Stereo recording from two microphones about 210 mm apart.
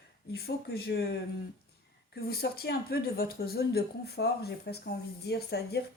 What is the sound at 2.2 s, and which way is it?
Speech, 45° left (ahead or behind).